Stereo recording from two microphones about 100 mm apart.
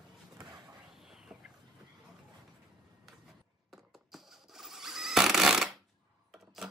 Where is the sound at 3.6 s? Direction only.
5° right (ahead or behind).